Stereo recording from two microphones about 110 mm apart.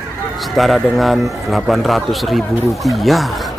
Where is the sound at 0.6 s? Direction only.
Centre (ahead or behind).